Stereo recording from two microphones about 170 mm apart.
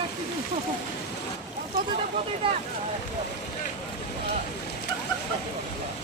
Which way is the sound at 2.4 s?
30° right (ahead or behind).